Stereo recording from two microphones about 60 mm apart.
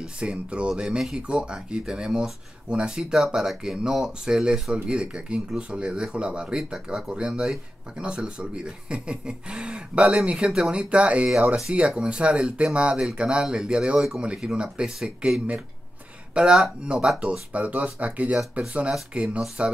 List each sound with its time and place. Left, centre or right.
0.0 s speech: centre
11.2 s speech: centre
14.2 s speech: centre